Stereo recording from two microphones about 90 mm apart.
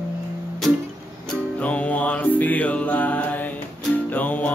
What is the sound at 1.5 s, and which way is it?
Music, 15° left (ahead or behind).